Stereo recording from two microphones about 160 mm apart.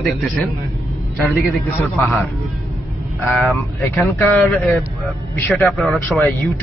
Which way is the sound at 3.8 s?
15° left (ahead or behind).